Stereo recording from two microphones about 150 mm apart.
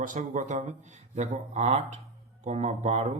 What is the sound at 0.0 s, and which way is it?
Speech, 60° right (ahead or behind).